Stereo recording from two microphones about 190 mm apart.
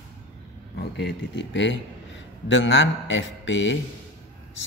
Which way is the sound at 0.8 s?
65° left (ahead or behind).